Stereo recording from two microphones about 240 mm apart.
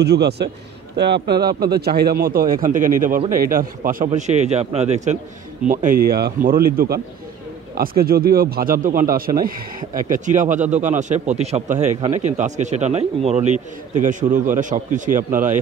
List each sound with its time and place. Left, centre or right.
0.0 s speech: right